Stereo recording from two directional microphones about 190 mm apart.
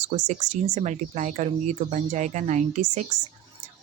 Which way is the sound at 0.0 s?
35° right (ahead or behind).